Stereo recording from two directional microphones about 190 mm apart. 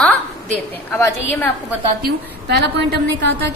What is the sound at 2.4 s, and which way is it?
Speech, 60° right (ahead or behind).